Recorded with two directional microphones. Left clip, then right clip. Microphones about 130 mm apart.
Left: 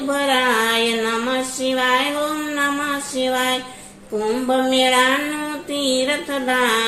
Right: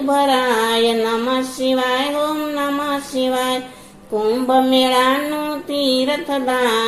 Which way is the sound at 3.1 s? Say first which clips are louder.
Right 1 dB; 40° right (ahead or behind).